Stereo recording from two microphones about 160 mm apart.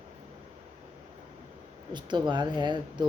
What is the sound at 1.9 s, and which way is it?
Speech, 30° right (ahead or behind).